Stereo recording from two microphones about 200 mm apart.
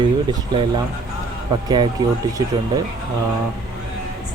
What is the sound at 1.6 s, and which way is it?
Speech, 20° right (ahead or behind).